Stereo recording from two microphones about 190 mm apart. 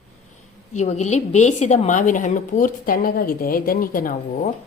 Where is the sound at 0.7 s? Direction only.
35° left (ahead or behind).